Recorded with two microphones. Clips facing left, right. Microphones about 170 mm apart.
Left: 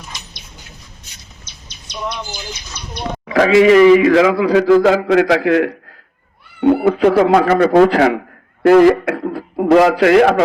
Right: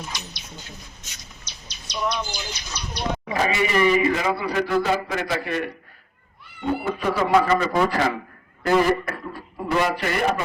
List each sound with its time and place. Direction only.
1.5 s a sound: 55° left (ahead or behind)
2.8 s speech: 55° left (ahead or behind)
3.3 s a man's voice: 90° left
6.6 s speech: 70° left (ahead or behind)
7.1 s a man's voice: 60° left (ahead or behind)
8.6 s a man's voice: 80° left